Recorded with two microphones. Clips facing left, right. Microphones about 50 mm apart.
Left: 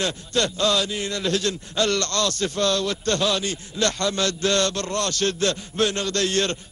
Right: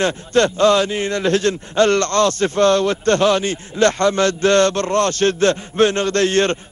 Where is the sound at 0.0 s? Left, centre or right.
Right.